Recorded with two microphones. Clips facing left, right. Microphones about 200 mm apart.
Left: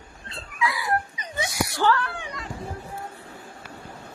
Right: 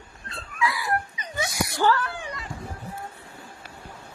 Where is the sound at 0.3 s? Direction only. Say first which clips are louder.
Even; 25° left (ahead or behind).